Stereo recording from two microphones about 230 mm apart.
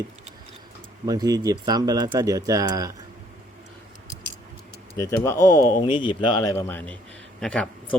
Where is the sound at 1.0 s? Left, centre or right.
Centre.